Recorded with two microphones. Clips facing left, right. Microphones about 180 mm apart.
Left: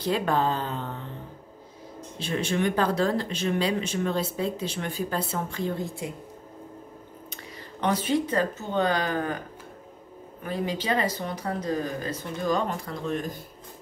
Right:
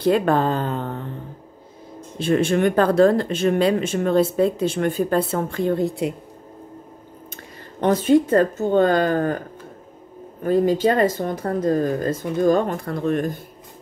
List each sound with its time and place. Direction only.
0.0 s speech: 55° right (ahead or behind)
2.1 s speech: 50° right (ahead or behind); by 6.1 s 65° right (ahead or behind)
7.8 s speech: 45° right (ahead or behind)
10.4 s speech: 45° right (ahead or behind)